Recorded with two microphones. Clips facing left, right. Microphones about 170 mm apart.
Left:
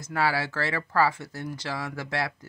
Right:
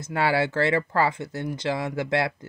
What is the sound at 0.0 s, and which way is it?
Speech, 25° right (ahead or behind).